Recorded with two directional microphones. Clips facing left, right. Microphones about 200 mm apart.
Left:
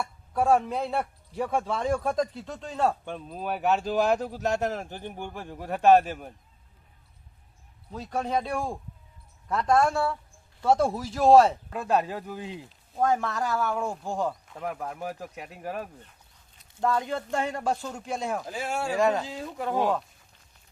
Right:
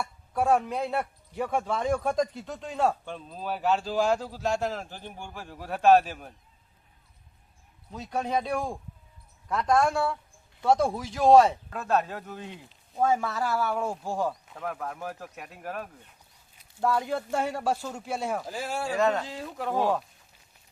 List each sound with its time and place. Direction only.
0.0 s speech: centre (ahead or behind)
3.0 s speech: 10° left (ahead or behind)
7.9 s speech: centre (ahead or behind)
11.7 s speech: 15° left (ahead or behind)
12.5 s speech: centre (ahead or behind)
14.6 s speech: 15° left (ahead or behind)
16.8 s speech: 5° right (ahead or behind)
18.9 s speech: 10° left (ahead or behind)
19.2 s speech: centre (ahead or behind)